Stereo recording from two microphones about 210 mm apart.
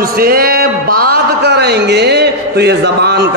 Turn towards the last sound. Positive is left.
turn(degrees=-50)  # may be behind; listen again after turning